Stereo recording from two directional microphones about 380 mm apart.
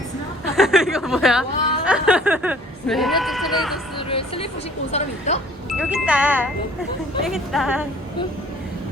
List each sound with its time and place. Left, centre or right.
0.5 s snicker: centre
3.9 s a sound: centre
4.9 s speech: centre
5.7 s speech: centre